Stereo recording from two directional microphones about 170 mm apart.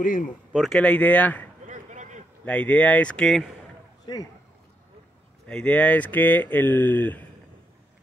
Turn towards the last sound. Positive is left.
turn(degrees=10)  # may be behind; listen again after turning